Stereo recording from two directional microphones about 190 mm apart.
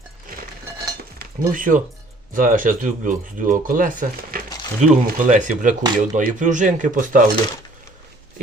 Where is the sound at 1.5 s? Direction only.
45° right (ahead or behind).